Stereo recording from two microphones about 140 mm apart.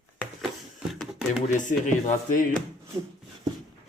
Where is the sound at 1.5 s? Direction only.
65° left (ahead or behind).